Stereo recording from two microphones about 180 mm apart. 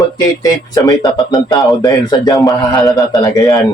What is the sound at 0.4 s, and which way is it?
A man's voice, 20° left (ahead or behind).